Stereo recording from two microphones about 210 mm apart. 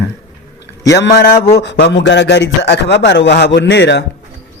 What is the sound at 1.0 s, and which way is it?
A man's voice, 50° left (ahead or behind).